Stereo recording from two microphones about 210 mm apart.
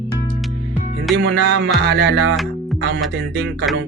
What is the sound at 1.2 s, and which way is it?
Music, 55° right (ahead or behind).